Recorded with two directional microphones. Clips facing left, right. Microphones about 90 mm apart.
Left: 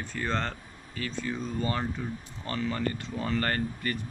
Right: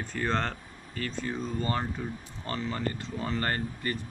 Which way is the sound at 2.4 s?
25° right (ahead or behind).